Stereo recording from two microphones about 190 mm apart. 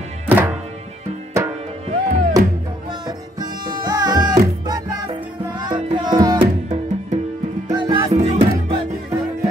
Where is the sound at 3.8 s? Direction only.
20° right (ahead or behind).